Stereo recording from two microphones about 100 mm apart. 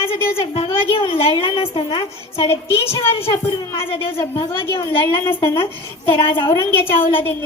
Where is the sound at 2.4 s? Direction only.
25° left (ahead or behind).